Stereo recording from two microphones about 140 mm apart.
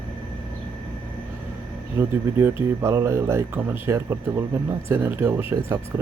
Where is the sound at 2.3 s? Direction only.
15° right (ahead or behind).